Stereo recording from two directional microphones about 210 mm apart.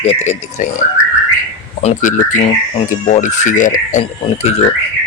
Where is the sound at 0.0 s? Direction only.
30° left (ahead or behind).